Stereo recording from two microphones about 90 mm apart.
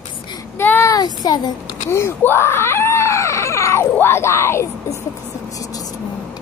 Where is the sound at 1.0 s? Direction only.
50° left (ahead or behind).